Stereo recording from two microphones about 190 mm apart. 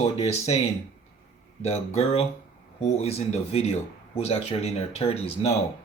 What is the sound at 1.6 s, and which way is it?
Speech, 35° left (ahead or behind).